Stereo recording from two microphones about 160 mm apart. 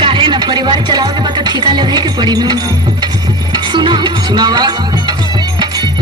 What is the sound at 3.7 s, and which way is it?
Music, 30° right (ahead or behind).